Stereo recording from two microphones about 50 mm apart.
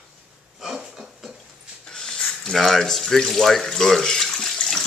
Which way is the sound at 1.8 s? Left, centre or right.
Centre.